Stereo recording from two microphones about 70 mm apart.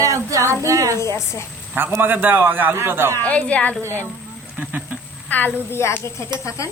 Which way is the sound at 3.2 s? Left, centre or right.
Centre.